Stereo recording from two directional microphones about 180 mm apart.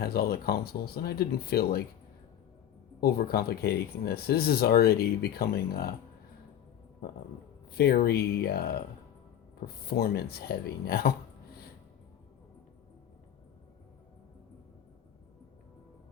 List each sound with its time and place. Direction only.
0.0 s speech: 60° left (ahead or behind)
3.0 s speech: 60° left (ahead or behind)
7.7 s speech: 60° left (ahead or behind)
9.8 s speech: 60° left (ahead or behind)